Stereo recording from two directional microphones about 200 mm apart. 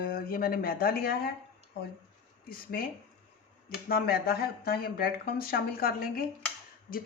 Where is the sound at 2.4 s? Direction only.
45° left (ahead or behind).